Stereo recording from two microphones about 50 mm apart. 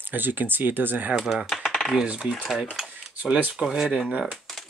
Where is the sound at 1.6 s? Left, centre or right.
Centre.